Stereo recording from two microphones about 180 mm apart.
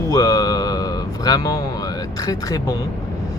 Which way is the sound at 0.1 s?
20° left (ahead or behind).